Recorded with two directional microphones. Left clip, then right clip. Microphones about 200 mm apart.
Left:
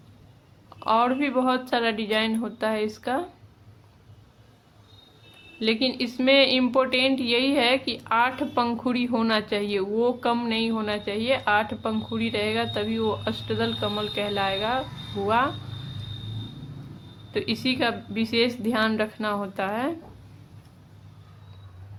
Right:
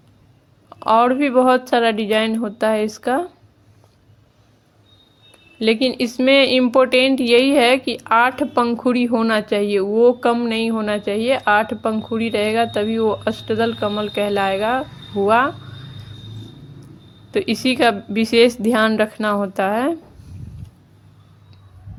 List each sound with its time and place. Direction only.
0.8 s a woman's voice: 35° right (ahead or behind)
5.5 s a woman's voice: 35° right (ahead or behind)
17.3 s a woman's voice: 35° right (ahead or behind)